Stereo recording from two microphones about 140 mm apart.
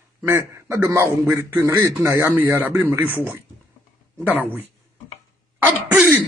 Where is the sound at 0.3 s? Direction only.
20° right (ahead or behind).